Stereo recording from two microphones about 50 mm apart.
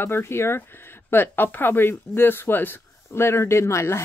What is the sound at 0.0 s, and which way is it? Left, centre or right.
Speech, left.